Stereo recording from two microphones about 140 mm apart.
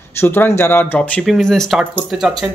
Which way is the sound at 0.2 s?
15° left (ahead or behind).